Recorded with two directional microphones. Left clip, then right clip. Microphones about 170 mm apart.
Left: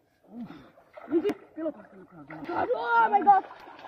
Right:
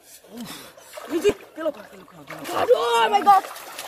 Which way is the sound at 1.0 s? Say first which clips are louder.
Right 6 dB; 40° right (ahead or behind).